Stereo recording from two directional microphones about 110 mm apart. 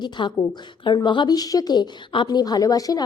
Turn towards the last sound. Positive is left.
turn(degrees=35)  # may be behind; listen again after turning